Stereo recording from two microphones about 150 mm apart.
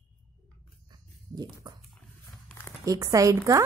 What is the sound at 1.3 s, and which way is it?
Dog, 25° right (ahead or behind).